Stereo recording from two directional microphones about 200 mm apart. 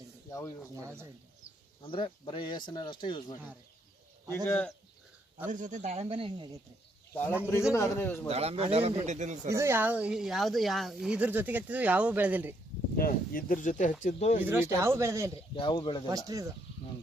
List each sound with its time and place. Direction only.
0.3 s speech: 15° left (ahead or behind)
1.8 s speech: 25° left (ahead or behind)
4.4 s speech: 5° left (ahead or behind)
5.5 s speech: 40° right (ahead or behind); by 6.6 s 25° right (ahead or behind)
7.7 s speech: 15° left (ahead or behind)
8.3 s speech: 30° right (ahead or behind)
9.5 s speech: 15° right (ahead or behind)
13.0 s speech: 45° left (ahead or behind)
14.4 s speech: 10° right (ahead or behind)
15.5 s speech: 25° left (ahead or behind)
16.0 s speech: 20° right (ahead or behind)